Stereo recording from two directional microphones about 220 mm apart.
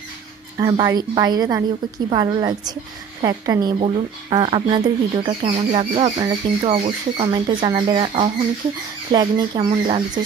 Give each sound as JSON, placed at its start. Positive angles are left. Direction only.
{"t": 0.6, "sound": "a woman's voice", "side_deg": -15}